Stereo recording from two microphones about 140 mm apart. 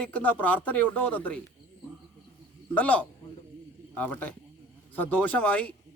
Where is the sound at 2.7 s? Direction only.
10° left (ahead or behind).